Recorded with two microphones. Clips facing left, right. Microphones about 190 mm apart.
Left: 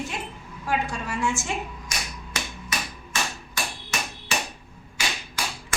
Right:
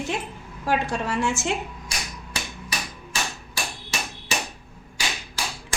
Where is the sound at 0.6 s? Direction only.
70° right (ahead or behind).